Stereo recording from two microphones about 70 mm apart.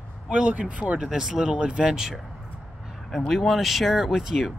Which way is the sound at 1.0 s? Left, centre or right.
Centre.